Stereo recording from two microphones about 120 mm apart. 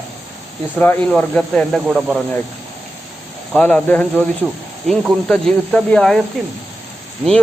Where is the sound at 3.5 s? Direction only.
10° left (ahead or behind).